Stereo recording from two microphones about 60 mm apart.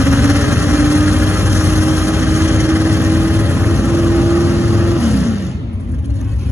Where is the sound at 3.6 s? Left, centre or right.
Right.